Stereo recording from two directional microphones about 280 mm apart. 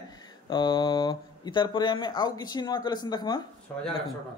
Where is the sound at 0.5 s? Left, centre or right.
Centre.